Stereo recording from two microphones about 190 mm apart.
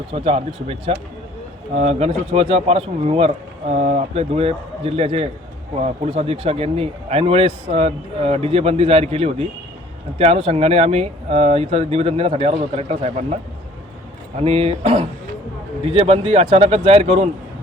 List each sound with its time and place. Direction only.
0.1 s a man's voice: 30° right (ahead or behind)
14.3 s a man's voice: 30° right (ahead or behind)